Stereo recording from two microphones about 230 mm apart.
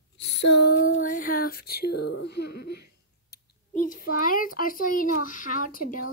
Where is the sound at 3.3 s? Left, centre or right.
Left.